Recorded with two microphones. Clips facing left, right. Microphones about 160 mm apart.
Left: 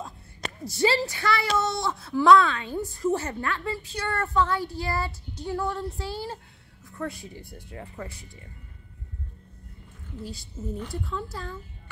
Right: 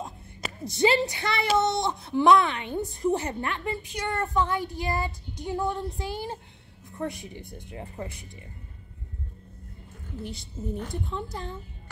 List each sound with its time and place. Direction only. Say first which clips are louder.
0.7 s a woman's voice: right 1 dB; 20° right (ahead or behind)
10.6 s a woman's voice: right 1 dB; 30° right (ahead or behind)
10.9 s speech: even; 20° right (ahead or behind)